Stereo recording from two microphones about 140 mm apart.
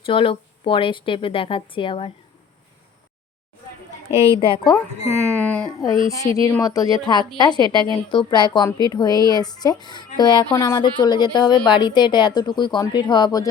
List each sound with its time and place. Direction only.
0.0 s a woman's voice: 40° left (ahead or behind)
4.1 s a woman's voice: 40° left (ahead or behind)
5.0 s speech: 15° left (ahead or behind)
6.1 s a woman's voice: 25° left (ahead or behind)